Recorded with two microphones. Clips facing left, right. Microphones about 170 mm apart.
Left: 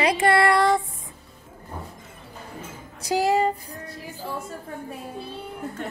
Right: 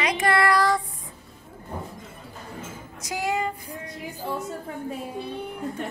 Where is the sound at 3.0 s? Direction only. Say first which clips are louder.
Left 6 dB; 35° left (ahead or behind).